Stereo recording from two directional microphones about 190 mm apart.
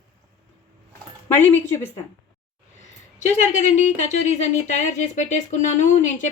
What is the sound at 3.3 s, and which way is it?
Speech, 40° left (ahead or behind).